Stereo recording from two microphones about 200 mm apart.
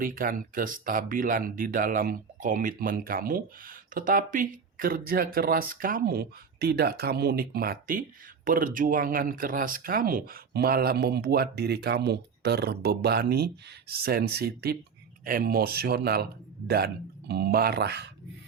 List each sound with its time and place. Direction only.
0.0 s speech: 45° right (ahead or behind)